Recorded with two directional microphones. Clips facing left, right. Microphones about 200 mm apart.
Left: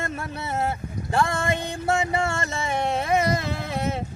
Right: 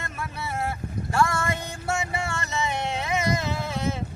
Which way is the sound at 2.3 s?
45° left (ahead or behind).